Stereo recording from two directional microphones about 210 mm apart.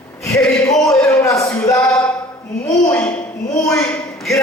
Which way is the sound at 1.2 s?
15° left (ahead or behind).